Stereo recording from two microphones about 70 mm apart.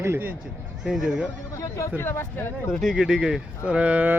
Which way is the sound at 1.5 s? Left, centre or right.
Left.